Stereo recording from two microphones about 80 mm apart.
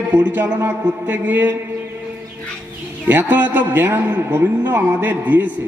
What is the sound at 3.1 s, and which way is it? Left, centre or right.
A man's voice, right.